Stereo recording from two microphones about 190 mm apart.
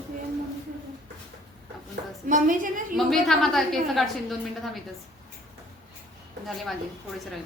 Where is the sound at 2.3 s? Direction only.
45° right (ahead or behind).